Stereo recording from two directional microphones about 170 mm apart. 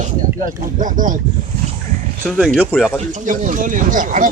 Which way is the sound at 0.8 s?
50° right (ahead or behind).